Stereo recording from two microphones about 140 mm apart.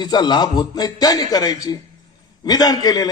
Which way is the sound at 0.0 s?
30° left (ahead or behind).